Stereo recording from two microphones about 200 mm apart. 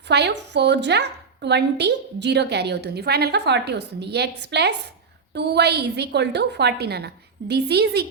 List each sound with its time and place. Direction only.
0.1 s a woman's voice: 60° right (ahead or behind)